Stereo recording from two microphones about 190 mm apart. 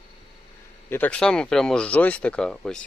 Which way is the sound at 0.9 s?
10° left (ahead or behind).